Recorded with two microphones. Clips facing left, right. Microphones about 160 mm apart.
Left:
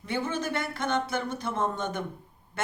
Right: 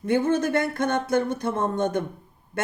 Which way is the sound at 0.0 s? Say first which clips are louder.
Right 9 dB; 50° right (ahead or behind).